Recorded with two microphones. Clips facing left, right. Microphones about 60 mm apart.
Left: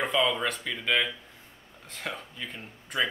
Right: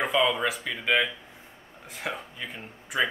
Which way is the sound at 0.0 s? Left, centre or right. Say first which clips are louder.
Right 2 dB; centre.